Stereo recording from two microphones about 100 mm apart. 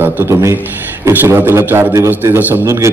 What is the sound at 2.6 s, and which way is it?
Speech, 30° right (ahead or behind).